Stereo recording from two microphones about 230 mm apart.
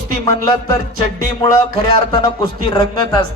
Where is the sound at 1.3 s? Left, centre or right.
Centre.